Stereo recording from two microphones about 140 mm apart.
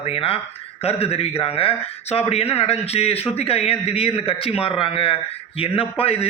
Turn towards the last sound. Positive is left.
turn(degrees=40)  # may be behind; listen again after turning